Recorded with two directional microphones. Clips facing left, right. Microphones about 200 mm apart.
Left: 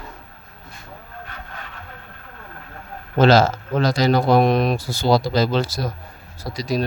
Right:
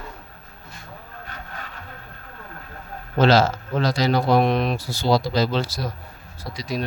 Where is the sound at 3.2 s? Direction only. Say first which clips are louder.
Left 2 dB; 45° left (ahead or behind).